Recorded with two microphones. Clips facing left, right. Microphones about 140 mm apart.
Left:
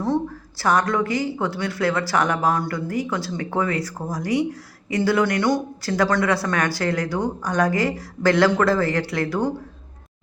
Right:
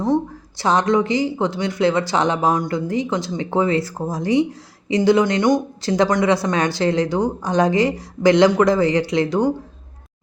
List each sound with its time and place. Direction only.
0.6 s speech: 20° right (ahead or behind)